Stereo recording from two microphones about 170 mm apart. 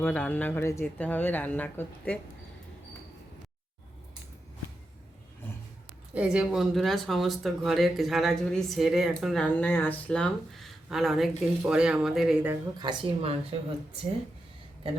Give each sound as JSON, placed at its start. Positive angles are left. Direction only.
{"t": 0.0, "sound": "speech", "side_deg": 10}
{"t": 6.1, "sound": "speech", "side_deg": -5}
{"t": 12.8, "sound": "a woman's voice", "side_deg": -25}